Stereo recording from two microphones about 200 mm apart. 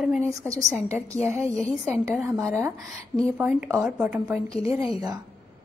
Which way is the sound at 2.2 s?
15° right (ahead or behind).